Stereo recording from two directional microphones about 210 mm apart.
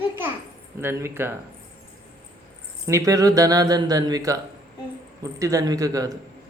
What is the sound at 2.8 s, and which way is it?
Speech, 15° right (ahead or behind).